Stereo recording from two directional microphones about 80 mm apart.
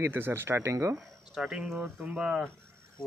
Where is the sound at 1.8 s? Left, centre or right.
Centre.